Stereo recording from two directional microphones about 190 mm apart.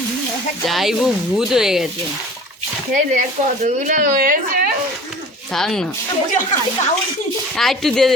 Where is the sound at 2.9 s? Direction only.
40° right (ahead or behind).